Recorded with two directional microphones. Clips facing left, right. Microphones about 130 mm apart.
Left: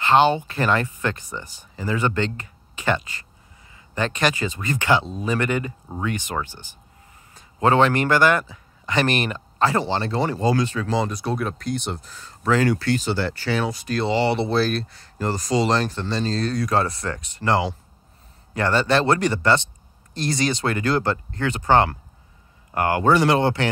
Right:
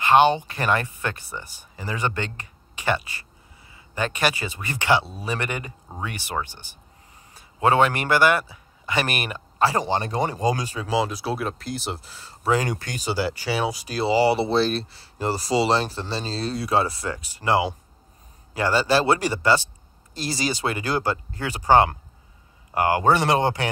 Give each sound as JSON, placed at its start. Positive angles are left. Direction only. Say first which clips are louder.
{"t": 0.0, "sound": "speech", "louder": "even", "side_deg": -15}
{"t": 7.6, "sound": "speech", "louder": "left 2 dB", "side_deg": -15}
{"t": 12.5, "sound": "speech", "louder": "left 6 dB", "side_deg": -15}